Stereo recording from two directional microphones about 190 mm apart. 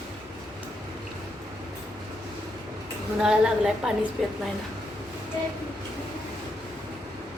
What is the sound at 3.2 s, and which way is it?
Speech, 5° right (ahead or behind).